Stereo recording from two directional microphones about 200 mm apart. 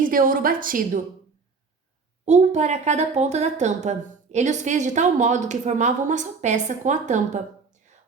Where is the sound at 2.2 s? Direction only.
35° right (ahead or behind).